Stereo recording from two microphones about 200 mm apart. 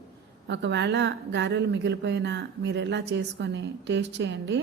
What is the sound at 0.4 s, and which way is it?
A woman's voice, 60° right (ahead or behind).